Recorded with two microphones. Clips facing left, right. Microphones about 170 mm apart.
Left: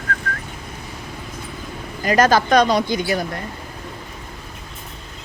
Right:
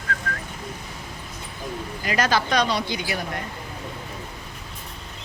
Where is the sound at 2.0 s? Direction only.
45° left (ahead or behind).